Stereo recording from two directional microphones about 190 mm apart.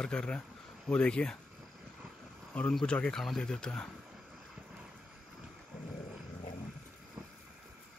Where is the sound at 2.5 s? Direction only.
5° left (ahead or behind).